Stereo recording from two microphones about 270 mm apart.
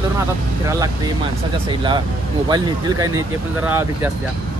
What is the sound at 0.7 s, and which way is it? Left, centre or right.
Speech, centre.